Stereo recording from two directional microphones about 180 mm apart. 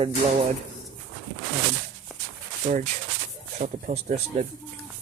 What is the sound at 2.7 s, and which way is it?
Speech, 45° right (ahead or behind).